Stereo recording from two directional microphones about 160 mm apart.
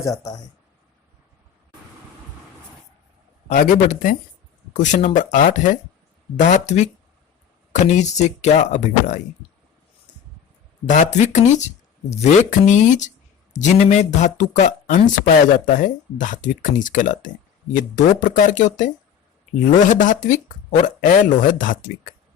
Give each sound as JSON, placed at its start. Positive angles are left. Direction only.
{"t": 0.0, "sound": "speech", "side_deg": 20}
{"t": 3.5, "sound": "speech", "side_deg": 55}
{"t": 10.8, "sound": "speech", "side_deg": 50}